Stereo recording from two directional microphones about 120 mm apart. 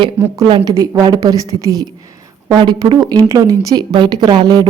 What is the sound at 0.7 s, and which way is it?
Speech, 30° right (ahead or behind).